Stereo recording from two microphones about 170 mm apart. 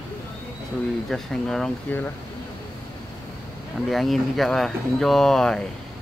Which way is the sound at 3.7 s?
Centre (ahead or behind).